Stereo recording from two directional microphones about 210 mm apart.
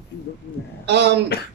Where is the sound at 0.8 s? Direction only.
55° right (ahead or behind).